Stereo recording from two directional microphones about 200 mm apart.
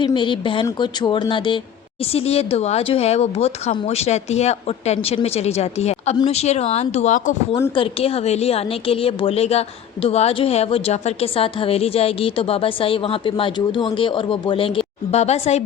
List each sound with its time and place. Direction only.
0.0 s a woman's voice: 25° left (ahead or behind)